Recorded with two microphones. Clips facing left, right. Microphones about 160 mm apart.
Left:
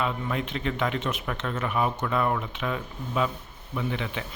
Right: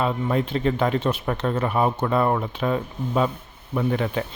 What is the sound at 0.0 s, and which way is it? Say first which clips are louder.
Speech: right 6 dB; 35° right (ahead or behind).